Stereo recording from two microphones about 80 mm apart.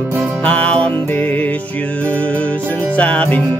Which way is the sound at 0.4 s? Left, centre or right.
Centre.